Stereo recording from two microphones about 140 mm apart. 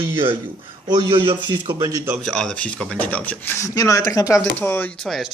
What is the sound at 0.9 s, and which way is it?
A man's voice, 35° right (ahead or behind).